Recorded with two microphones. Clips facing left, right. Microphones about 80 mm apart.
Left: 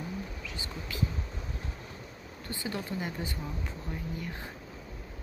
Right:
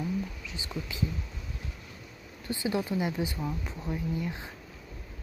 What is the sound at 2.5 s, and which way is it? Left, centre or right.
Speech, centre.